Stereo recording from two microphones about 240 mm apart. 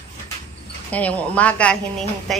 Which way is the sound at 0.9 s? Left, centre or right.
Centre.